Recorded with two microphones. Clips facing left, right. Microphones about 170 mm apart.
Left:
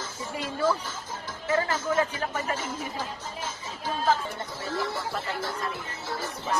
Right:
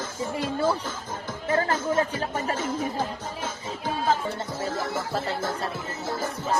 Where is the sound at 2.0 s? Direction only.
30° right (ahead or behind).